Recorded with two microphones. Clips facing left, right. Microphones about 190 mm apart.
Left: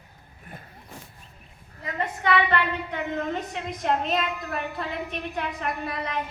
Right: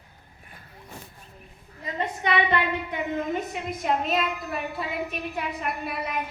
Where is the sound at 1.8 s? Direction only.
20° right (ahead or behind).